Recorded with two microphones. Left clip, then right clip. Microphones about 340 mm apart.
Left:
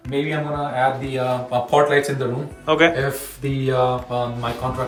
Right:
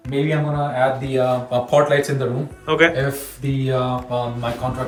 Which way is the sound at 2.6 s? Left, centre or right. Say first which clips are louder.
Even; centre.